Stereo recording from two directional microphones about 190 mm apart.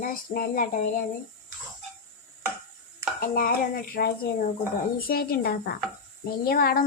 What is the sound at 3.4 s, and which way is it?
Speech, 50° left (ahead or behind).